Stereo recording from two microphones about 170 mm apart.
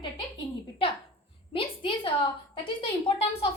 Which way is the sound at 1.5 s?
30° left (ahead or behind).